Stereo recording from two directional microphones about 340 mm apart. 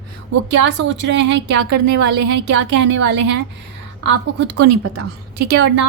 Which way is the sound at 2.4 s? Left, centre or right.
Right.